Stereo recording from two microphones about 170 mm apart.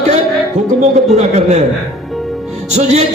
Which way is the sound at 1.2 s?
40° right (ahead or behind).